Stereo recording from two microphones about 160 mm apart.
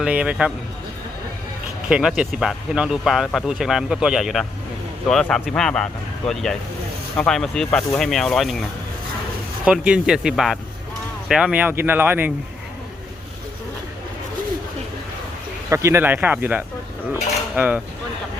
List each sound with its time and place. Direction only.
0.0 s speech: 10° right (ahead or behind)
1.9 s speech: 5° right (ahead or behind)
9.6 s speech: 5° right (ahead or behind)
15.7 s speech: 15° right (ahead or behind)